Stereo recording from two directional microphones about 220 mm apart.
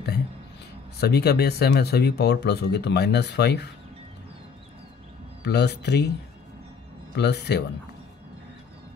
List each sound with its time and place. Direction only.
1.0 s speech: 45° left (ahead or behind)
5.4 s speech: 50° left (ahead or behind)
7.2 s speech: 50° left (ahead or behind)